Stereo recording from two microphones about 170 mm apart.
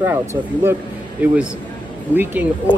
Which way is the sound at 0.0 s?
15° right (ahead or behind).